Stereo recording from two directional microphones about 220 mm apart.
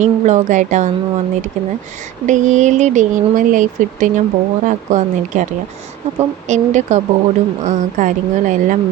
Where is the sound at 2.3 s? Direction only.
35° right (ahead or behind).